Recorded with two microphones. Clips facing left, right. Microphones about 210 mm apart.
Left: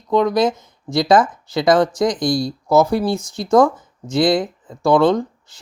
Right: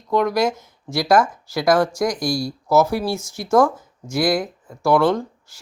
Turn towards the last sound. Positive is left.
turn(degrees=15)  # may be behind; listen again after turning